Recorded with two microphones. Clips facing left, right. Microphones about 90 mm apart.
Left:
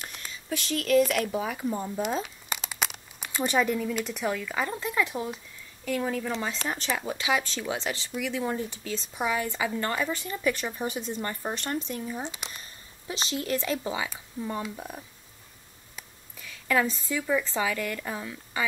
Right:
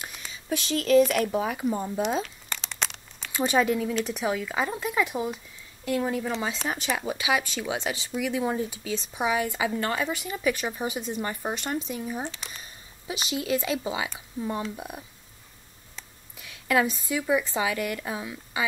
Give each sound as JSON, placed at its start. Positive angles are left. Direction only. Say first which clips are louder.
{"t": 0.0, "sound": "a sound", "louder": "right 1 dB", "side_deg": -5}
{"t": 0.3, "sound": "speech", "louder": "right 3 dB", "side_deg": -20}
{"t": 1.0, "sound": "speech", "louder": "right 3 dB", "side_deg": -5}
{"t": 2.2, "sound": "crumpling", "louder": "left 2 dB", "side_deg": 5}
{"t": 3.3, "sound": "speech", "louder": "right 2 dB", "side_deg": -15}
{"t": 13.3, "sound": "speech", "louder": "right 2 dB", "side_deg": -15}
{"t": 16.3, "sound": "speech", "louder": "right 2 dB", "side_deg": -15}